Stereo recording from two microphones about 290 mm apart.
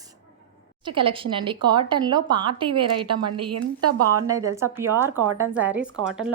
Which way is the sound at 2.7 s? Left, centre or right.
Right.